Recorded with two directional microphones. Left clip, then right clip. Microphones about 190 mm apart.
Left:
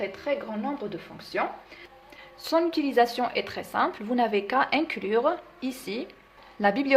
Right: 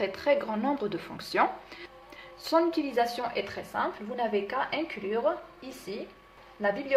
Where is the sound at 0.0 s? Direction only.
Centre (ahead or behind).